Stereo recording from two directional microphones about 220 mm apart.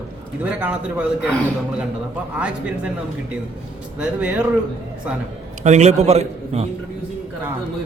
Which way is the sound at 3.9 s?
5° right (ahead or behind).